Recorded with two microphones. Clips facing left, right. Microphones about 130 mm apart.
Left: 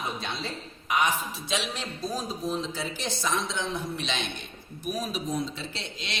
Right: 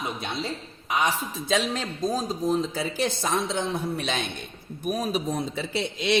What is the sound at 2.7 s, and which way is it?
A woman's voice, 50° right (ahead or behind).